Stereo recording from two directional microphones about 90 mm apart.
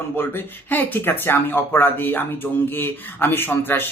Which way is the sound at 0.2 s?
25° left (ahead or behind).